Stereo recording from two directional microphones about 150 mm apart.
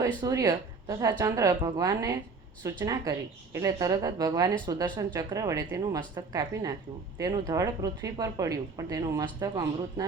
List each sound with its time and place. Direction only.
0.2 s a woman's voice: 25° right (ahead or behind)